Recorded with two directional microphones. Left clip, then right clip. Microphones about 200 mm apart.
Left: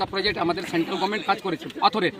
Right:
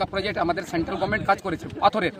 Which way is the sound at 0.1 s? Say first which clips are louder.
Left 1 dB; 20° right (ahead or behind).